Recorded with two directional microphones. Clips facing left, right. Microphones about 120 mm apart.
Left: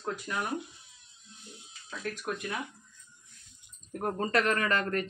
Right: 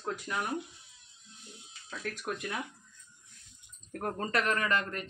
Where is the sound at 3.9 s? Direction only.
25° left (ahead or behind); by 5.0 s 45° left (ahead or behind).